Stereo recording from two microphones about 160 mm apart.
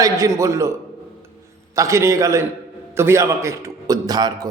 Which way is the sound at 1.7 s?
20° right (ahead or behind).